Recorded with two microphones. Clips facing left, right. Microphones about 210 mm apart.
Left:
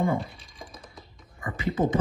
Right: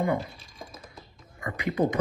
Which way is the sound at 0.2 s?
Centre (ahead or behind).